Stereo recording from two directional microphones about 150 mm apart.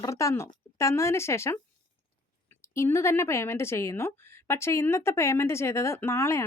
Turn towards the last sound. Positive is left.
turn(degrees=15)  # may be behind; listen again after turning